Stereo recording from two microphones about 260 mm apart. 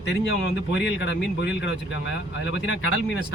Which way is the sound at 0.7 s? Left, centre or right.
Left.